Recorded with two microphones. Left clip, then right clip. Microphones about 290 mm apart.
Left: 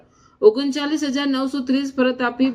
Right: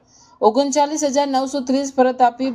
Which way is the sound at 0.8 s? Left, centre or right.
Right.